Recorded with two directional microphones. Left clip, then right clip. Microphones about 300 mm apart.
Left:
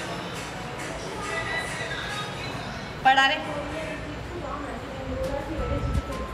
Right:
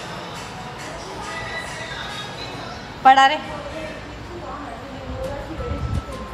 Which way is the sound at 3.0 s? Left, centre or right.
Centre.